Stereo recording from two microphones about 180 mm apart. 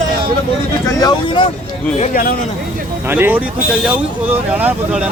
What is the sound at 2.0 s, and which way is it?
Speech, 50° left (ahead or behind).